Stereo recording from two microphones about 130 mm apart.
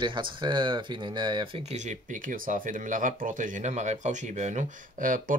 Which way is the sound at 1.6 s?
65° right (ahead or behind).